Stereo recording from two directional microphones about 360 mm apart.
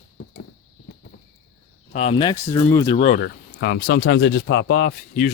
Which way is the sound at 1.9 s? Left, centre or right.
Centre.